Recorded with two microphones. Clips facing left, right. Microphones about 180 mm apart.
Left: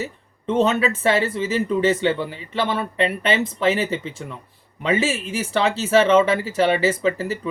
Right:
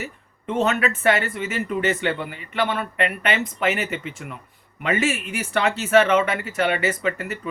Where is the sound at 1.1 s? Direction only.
30° left (ahead or behind).